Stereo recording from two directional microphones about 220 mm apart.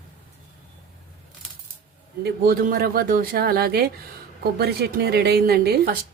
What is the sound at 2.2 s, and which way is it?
A woman's voice, 40° right (ahead or behind).